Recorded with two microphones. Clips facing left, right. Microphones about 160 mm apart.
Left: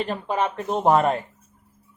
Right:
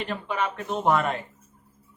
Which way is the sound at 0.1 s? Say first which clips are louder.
Left 4 dB; 35° left (ahead or behind).